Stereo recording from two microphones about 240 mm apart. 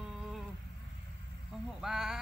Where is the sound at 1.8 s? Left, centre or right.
Centre.